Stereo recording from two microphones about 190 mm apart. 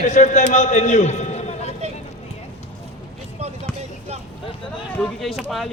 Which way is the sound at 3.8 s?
35° right (ahead or behind).